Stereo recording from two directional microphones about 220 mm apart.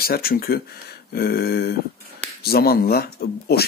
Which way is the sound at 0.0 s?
45° left (ahead or behind).